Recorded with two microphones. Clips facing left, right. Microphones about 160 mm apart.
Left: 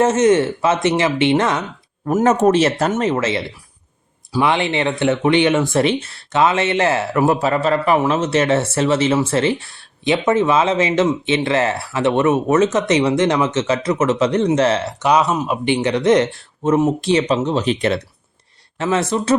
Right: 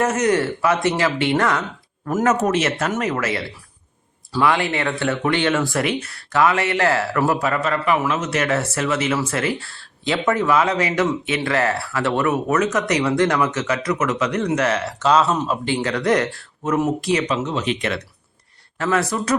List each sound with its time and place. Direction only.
0.0 s speech: 25° left (ahead or behind)